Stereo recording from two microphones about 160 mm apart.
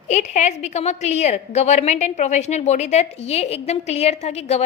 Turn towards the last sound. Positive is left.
turn(degrees=45)  # may be behind; listen again after turning